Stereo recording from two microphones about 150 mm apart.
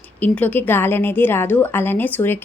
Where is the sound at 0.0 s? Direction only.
10° left (ahead or behind).